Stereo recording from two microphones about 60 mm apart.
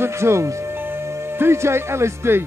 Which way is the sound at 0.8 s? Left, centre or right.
Right.